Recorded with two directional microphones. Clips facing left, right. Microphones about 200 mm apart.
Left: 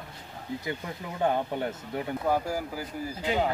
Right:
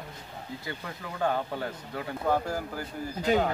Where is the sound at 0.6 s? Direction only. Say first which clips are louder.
Left 3 dB; 20° left (ahead or behind).